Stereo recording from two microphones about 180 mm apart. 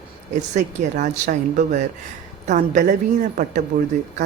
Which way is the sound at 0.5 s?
40° right (ahead or behind).